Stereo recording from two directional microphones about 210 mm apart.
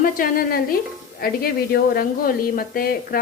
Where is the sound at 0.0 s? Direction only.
45° left (ahead or behind).